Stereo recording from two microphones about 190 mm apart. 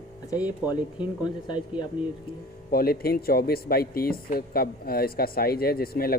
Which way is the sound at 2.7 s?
50° left (ahead or behind).